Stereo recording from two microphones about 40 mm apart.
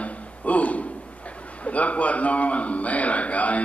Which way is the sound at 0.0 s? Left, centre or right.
Left.